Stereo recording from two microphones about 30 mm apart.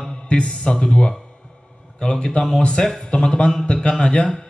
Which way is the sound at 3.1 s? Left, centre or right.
Left.